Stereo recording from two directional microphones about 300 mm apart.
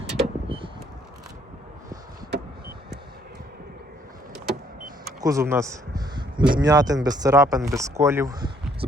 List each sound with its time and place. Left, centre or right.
0.0 s vehicle: centre
5.2 s a man's voice: centre